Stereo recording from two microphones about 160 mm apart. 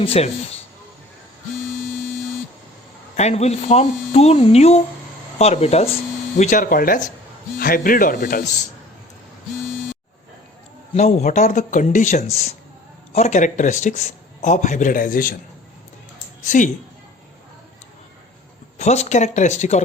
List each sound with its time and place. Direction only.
0.0 s speech: 40° left (ahead or behind)
3.2 s speech: 45° left (ahead or behind)
6.3 s a man's voice: 50° left (ahead or behind)
10.9 s a man's voice: 45° left (ahead or behind); by 15.4 s 60° left (ahead or behind)
16.4 s a woman's voice: 50° left (ahead or behind)
18.8 s speech: 45° left (ahead or behind)